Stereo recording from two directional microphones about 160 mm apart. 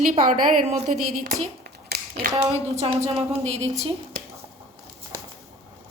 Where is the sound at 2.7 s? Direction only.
40° right (ahead or behind).